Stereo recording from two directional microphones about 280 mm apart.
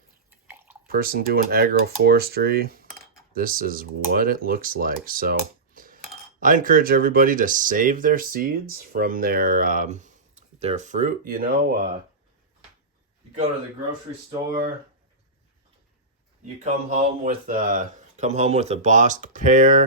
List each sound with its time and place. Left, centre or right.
0.9 s speech: right
16.9 s speech: right